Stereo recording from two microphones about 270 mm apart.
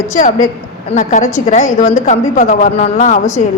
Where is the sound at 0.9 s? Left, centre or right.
Left.